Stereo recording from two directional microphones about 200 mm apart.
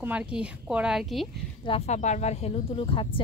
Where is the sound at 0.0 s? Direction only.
5° right (ahead or behind).